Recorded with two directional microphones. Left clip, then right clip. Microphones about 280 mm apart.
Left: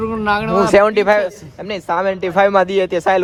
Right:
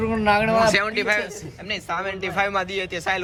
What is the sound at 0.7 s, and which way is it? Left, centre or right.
A man's voice, left.